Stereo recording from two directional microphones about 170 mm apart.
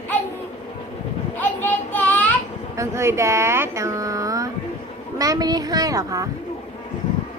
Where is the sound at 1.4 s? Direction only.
10° left (ahead or behind).